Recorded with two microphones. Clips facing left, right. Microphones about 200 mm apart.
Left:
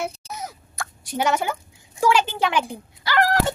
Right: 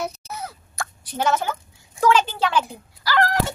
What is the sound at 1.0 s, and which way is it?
A woman's voice, 15° left (ahead or behind).